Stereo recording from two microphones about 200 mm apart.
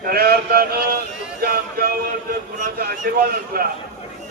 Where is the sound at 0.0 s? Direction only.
50° right (ahead or behind).